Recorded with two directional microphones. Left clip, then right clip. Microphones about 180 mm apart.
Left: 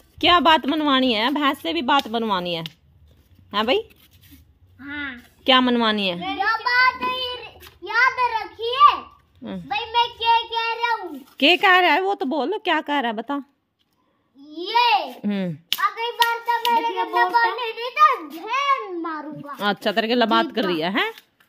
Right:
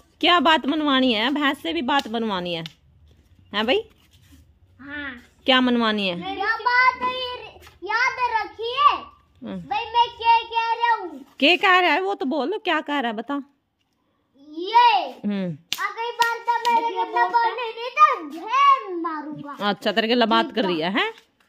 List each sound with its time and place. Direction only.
0.2 s a woman's voice: centre (ahead or behind)
4.7 s a sound: 15° left (ahead or behind)
5.4 s a woman's voice: centre (ahead or behind)
6.3 s child singing: 20° left (ahead or behind)
9.4 s a woman's voice: centre (ahead or behind)
9.7 s a sound: 15° left (ahead or behind)
11.3 s a woman's voice: centre (ahead or behind)
14.5 s a child's voice: 20° left (ahead or behind)
15.2 s a child's voice: 5° left (ahead or behind)
15.8 s hands: 20° left (ahead or behind)
17.4 s a child's voice: 25° left (ahead or behind); by 21.2 s centre (ahead or behind)